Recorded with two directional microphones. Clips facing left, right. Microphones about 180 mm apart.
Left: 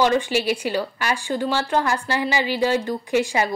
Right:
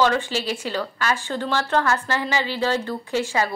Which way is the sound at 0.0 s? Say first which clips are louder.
Left 2 dB; 15° left (ahead or behind).